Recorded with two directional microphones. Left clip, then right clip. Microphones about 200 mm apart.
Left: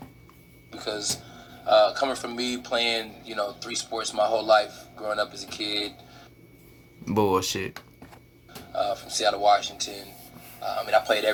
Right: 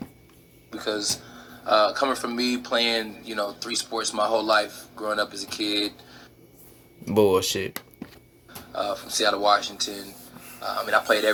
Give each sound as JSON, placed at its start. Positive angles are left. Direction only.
{"t": 0.7, "sound": "a sound", "side_deg": -20}
{"t": 1.6, "sound": "speech", "side_deg": -20}
{"t": 7.0, "sound": "speech", "side_deg": 10}
{"t": 8.7, "sound": "a man's voice", "side_deg": -15}